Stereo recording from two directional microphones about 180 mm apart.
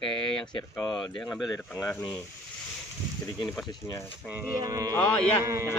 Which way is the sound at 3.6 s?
20° left (ahead or behind).